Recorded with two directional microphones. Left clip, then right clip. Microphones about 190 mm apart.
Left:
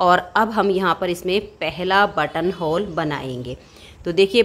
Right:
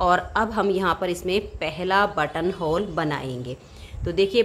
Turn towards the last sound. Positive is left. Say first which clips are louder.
# left 5 dB
turn(degrees=20)  # may be behind; listen again after turning